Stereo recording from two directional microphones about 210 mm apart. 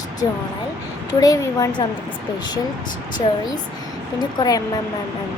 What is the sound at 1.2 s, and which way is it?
Speech, 15° left (ahead or behind).